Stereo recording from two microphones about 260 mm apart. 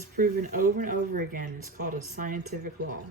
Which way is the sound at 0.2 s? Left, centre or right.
Right.